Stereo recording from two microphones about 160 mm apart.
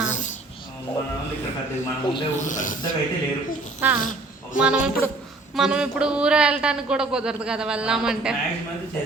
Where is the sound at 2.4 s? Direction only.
55° left (ahead or behind).